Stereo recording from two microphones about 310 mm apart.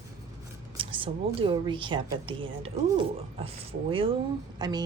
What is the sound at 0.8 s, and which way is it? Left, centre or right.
A woman's voice, centre.